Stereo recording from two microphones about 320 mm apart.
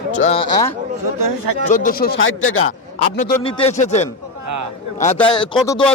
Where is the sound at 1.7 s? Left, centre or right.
Left.